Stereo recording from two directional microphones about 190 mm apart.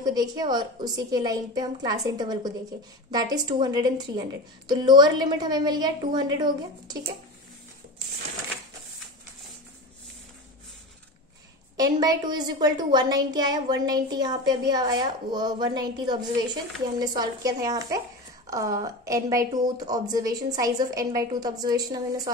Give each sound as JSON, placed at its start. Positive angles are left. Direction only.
{"t": 0.0, "sound": "a woman's voice", "side_deg": -20}
{"t": 11.7, "sound": "a woman's voice", "side_deg": -20}